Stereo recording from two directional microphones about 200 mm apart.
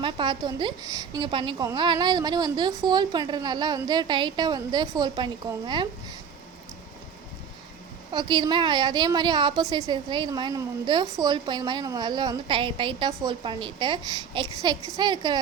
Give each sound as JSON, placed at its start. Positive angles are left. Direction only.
{"t": 0.0, "sound": "a woman's voice", "side_deg": -25}
{"t": 8.1, "sound": "a woman's voice", "side_deg": -20}